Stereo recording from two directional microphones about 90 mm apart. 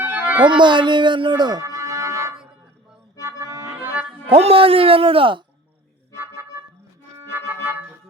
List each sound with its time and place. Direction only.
0.0 s music: 15° right (ahead or behind)
0.4 s speech: 60° right (ahead or behind)
1.6 s a sound: 35° right (ahead or behind)
3.2 s music: 35° right (ahead or behind)
4.3 s speech: 90° right; by 5.4 s 75° right (ahead or behind)
7.3 s organ: 20° right (ahead or behind)